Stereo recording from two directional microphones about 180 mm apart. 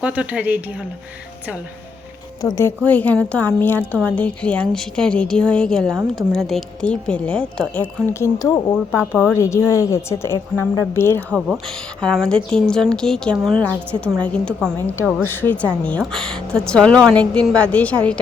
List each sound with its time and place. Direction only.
0.0 s a woman's voice: 10° right (ahead or behind)
2.4 s a woman's voice: 20° left (ahead or behind)
8.9 s a woman's voice: 5° right (ahead or behind)
9.3 s a woman's voice: 15° left (ahead or behind)
11.3 s a woman's voice: 5° right (ahead or behind)